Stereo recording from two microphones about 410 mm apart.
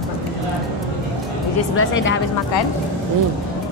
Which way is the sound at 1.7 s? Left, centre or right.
Left.